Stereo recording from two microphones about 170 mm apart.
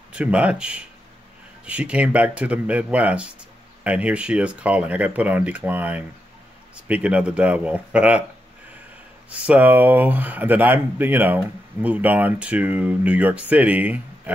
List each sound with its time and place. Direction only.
0.1 s speech: 5° right (ahead or behind)
9.3 s speech: 10° right (ahead or behind)